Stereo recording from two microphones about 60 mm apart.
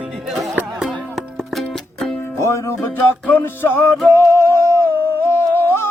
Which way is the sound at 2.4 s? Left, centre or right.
Left.